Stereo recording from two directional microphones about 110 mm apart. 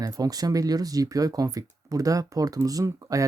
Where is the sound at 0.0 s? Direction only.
35° right (ahead or behind).